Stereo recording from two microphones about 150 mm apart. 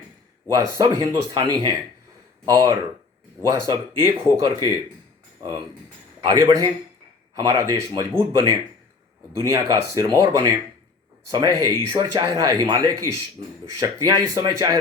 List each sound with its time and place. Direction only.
0.8 s speech: 25° right (ahead or behind)
6.2 s speech: 25° right (ahead or behind)